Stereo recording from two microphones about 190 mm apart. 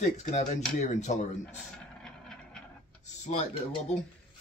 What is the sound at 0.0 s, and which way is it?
Speech, 35° left (ahead or behind).